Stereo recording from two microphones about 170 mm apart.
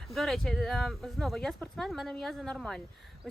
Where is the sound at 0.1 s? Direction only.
Centre (ahead or behind).